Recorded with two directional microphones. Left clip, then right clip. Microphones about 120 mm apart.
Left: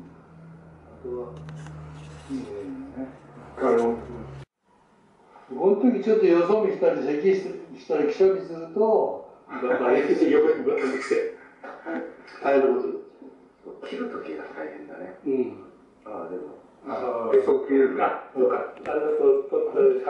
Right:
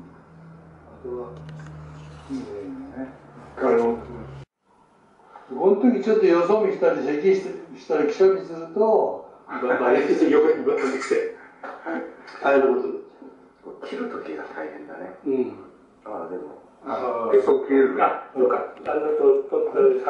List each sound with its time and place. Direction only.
3.5 s speech: 20° left (ahead or behind)
5.5 s speech: 20° left (ahead or behind)
6.2 s speech: 10° left (ahead or behind)
8.5 s speech: 30° left (ahead or behind)
9.5 s speech: 10° left (ahead or behind)